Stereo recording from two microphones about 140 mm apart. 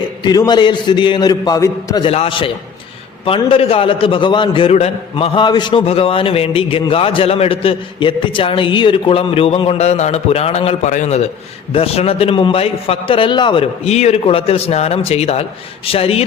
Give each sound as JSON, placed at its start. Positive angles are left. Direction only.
{"t": 0.2, "sound": "a man's voice", "side_deg": 30}
{"t": 2.0, "sound": "a man's voice", "side_deg": 40}
{"t": 5.8, "sound": "a man's voice", "side_deg": 45}